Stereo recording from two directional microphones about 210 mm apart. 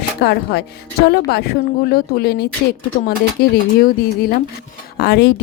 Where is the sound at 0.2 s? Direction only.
50° left (ahead or behind).